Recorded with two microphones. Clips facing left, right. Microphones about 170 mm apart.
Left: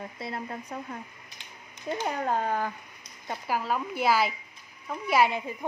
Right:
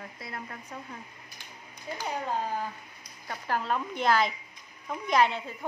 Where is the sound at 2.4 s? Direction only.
70° left (ahead or behind).